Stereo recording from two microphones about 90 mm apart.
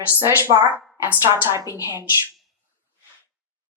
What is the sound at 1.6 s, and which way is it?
Speech, 40° left (ahead or behind).